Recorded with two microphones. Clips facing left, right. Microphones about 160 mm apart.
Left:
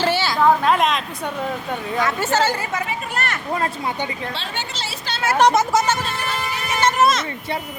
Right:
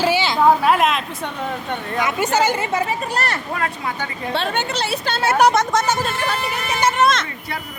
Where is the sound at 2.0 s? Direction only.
15° right (ahead or behind).